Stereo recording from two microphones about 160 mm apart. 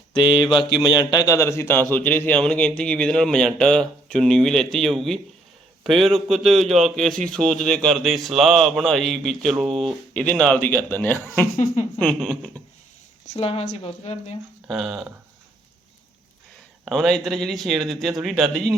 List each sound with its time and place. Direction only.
0.1 s mantra: 30° left (ahead or behind)
0.5 s a man's voice: 30° left (ahead or behind); by 12.5 s 5° left (ahead or behind)
13.2 s speech: 40° left (ahead or behind)
14.7 s a man's voice: centre (ahead or behind)
16.8 s a man's voice: centre (ahead or behind)